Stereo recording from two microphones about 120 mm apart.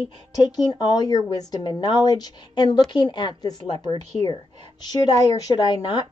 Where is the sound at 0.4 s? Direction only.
35° left (ahead or behind).